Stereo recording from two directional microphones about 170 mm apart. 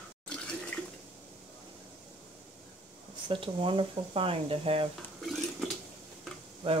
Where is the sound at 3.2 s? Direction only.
30° right (ahead or behind).